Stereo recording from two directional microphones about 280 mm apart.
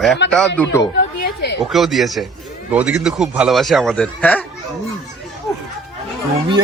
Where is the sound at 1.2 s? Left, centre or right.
Left.